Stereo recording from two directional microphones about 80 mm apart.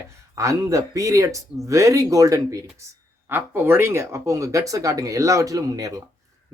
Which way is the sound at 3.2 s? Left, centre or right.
Right.